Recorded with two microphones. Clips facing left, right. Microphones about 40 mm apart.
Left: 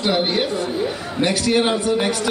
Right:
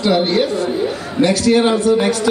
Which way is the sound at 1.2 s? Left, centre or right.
Left.